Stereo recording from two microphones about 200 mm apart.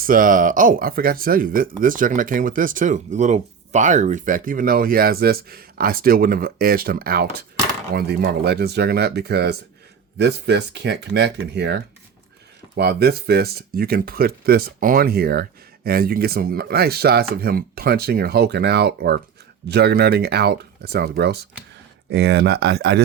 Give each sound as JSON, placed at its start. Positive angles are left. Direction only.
{"t": 0.0, "sound": "speech", "side_deg": -45}